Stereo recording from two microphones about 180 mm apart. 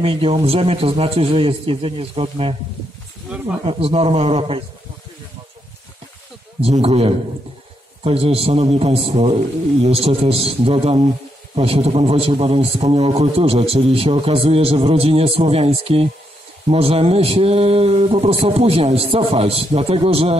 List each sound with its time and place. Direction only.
0.0 s a man's voice: 30° right (ahead or behind)
3.6 s a man's voice: 30° right (ahead or behind)
6.6 s a man's voice: 35° right (ahead or behind)